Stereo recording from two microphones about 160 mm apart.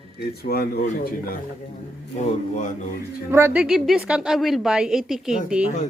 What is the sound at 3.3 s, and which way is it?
Speech, 15° right (ahead or behind).